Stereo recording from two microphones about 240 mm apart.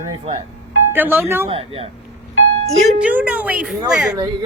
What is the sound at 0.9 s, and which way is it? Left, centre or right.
Speech, centre.